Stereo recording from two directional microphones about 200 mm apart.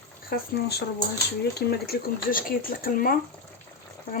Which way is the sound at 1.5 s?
50° left (ahead or behind).